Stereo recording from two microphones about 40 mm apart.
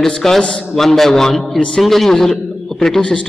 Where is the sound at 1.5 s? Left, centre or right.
Centre.